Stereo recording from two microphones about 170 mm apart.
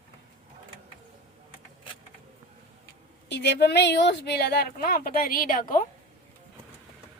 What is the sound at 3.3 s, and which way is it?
A woman's voice, 90° left.